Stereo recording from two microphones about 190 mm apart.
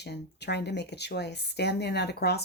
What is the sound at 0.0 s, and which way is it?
Speech, 60° left (ahead or behind).